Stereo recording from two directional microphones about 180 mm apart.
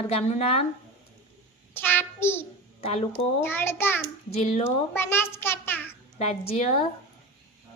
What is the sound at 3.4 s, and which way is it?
Speech, 10° left (ahead or behind).